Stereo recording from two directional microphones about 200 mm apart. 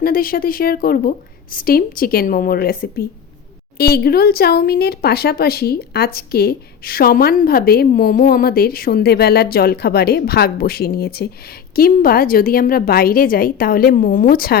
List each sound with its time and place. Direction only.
0.0 s speech: 45° left (ahead or behind)